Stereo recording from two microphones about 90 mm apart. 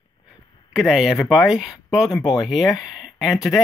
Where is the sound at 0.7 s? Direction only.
5° right (ahead or behind).